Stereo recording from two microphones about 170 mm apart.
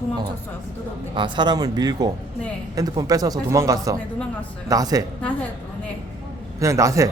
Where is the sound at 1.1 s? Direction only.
25° right (ahead or behind).